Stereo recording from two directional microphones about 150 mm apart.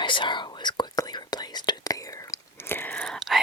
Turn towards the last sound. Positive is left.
turn(degrees=0)  # may be behind; listen again after turning